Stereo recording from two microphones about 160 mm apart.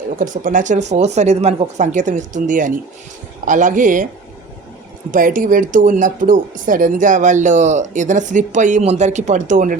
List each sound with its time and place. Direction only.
0.2 s speech: 55° right (ahead or behind)
5.1 s speech: 55° right (ahead or behind)